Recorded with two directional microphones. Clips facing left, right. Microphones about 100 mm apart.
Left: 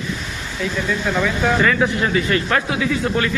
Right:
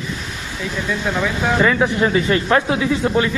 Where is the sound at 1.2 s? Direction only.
20° right (ahead or behind).